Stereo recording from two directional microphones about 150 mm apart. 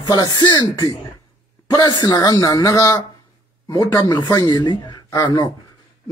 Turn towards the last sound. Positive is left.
turn(degrees=25)  # may be behind; listen again after turning